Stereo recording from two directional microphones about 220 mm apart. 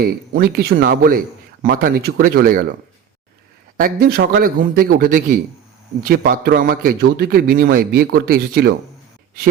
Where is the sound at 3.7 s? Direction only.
40° right (ahead or behind).